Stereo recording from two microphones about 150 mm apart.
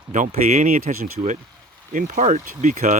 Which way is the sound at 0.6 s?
70° right (ahead or behind).